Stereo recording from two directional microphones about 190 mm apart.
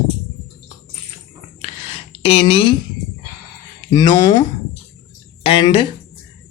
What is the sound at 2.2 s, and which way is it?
Speech, 30° left (ahead or behind).